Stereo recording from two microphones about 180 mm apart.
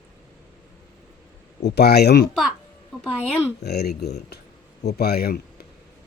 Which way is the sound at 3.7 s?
65° left (ahead or behind).